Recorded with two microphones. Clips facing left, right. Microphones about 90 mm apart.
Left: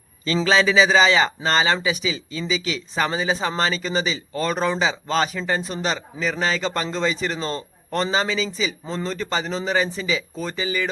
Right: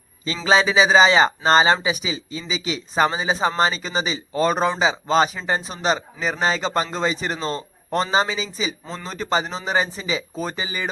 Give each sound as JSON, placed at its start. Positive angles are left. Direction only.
{"t": 0.4, "sound": "speech", "side_deg": -20}